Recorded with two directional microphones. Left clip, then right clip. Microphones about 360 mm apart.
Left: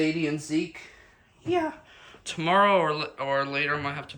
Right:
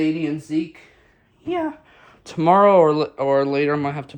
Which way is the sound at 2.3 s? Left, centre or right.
Centre.